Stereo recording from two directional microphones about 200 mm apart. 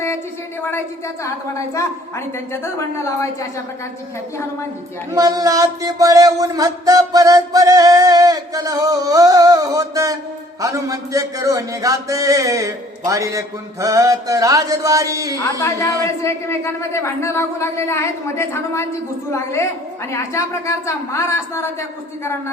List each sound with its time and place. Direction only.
0.6 s a woman's voice: 10° left (ahead or behind)
5.1 s music: 20° right (ahead or behind)
15.5 s a woman's voice: 15° left (ahead or behind)